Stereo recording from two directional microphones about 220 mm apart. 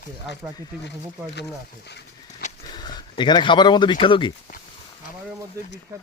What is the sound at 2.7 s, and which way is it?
Speech, 20° left (ahead or behind).